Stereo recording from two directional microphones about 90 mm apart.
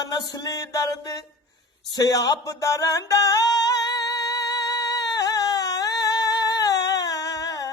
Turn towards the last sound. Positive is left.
turn(degrees=40)  # may be behind; listen again after turning